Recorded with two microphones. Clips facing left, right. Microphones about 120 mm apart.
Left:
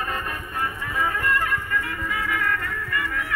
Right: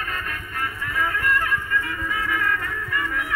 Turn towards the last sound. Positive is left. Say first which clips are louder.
# right 1 dB
turn(degrees=-5)  # may be behind; listen again after turning